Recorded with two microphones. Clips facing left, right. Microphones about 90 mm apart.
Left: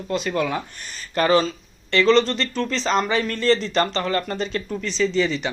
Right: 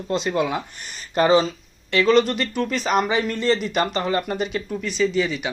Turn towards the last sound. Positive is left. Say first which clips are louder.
# even
turn(degrees=-10)  # may be behind; listen again after turning